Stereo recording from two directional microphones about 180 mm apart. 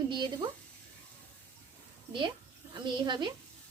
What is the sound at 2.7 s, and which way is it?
Speech, 25° right (ahead or behind).